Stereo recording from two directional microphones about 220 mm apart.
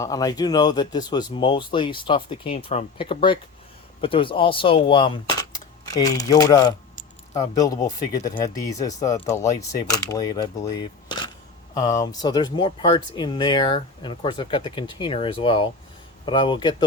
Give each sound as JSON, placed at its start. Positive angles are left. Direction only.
{"t": 0.0, "sound": "speech", "side_deg": 15}